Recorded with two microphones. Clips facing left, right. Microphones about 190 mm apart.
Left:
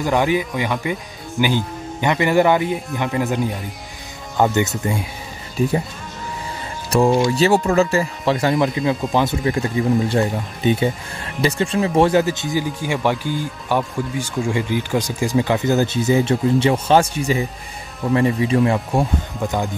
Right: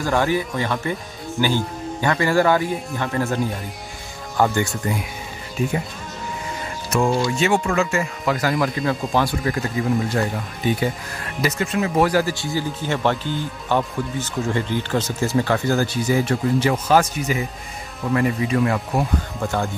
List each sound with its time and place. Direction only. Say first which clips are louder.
0.0 s speech: left 2 dB; 15° left (ahead or behind)
4.4 s speech: left 2 dB; 20° left (ahead or behind)
7.3 s speech: left 4 dB; 35° left (ahead or behind); by 19.7 s 15° left (ahead or behind)